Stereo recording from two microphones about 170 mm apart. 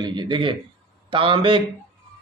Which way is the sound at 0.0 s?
25° right (ahead or behind).